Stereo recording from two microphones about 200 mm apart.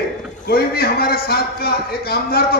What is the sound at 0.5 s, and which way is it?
A man's voice, 50° left (ahead or behind).